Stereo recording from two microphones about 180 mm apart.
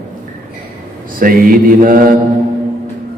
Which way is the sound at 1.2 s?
50° right (ahead or behind).